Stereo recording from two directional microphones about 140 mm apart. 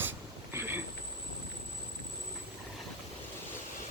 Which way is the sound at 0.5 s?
15° right (ahead or behind).